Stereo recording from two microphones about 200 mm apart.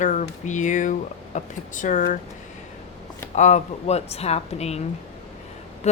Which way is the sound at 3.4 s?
35° left (ahead or behind).